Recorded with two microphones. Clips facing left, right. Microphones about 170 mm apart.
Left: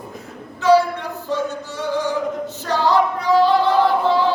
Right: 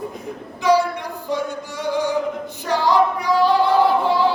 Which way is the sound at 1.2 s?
15° right (ahead or behind).